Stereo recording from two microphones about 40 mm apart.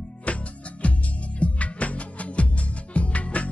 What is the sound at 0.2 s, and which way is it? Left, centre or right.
Music, left.